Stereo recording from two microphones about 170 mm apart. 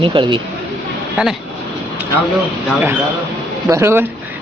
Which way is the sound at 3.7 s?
15° right (ahead or behind).